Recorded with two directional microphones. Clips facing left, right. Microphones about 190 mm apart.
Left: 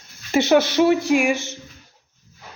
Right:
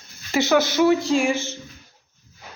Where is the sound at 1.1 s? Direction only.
20° left (ahead or behind).